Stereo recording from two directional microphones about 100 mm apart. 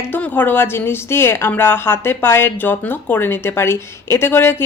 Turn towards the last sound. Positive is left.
turn(degrees=20)  # may be behind; listen again after turning